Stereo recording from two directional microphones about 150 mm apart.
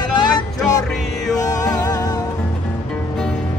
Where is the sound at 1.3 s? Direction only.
25° left (ahead or behind).